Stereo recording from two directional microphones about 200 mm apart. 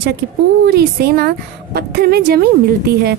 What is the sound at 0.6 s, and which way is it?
Speech, 55° right (ahead or behind).